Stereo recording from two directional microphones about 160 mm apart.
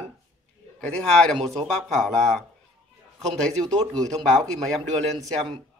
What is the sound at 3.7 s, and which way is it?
Speech, 20° right (ahead or behind).